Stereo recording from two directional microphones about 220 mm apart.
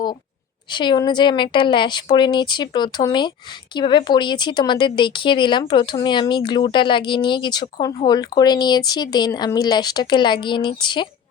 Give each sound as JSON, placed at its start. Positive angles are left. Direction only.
{"t": 0.7, "sound": "speech", "side_deg": 20}